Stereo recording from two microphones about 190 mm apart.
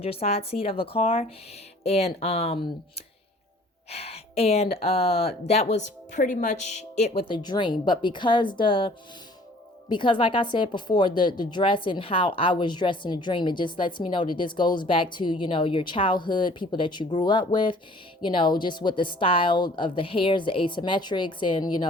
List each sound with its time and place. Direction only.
0.0 s speech: 30° left (ahead or behind)
3.8 s speech: 30° left (ahead or behind)
9.9 s speech: 25° left (ahead or behind)